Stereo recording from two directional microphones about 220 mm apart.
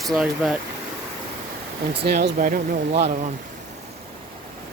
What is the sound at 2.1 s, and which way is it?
Speech, 45° right (ahead or behind).